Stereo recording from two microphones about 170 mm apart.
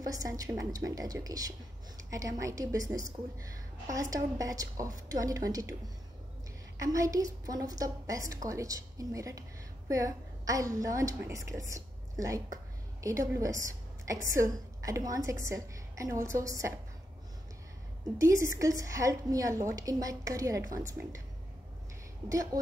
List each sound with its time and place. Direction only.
0.0 s a woman's voice: 20° right (ahead or behind)
6.8 s a woman's voice: 20° right (ahead or behind)
18.1 s a woman's voice: 15° right (ahead or behind)
22.3 s a woman's voice: 20° right (ahead or behind)